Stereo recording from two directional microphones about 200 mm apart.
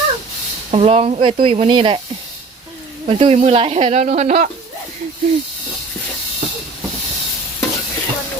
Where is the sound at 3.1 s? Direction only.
30° right (ahead or behind).